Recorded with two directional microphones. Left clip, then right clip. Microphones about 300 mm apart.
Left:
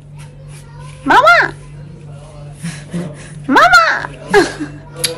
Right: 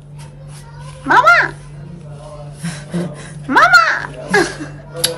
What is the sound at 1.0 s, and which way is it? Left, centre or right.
Speech, centre.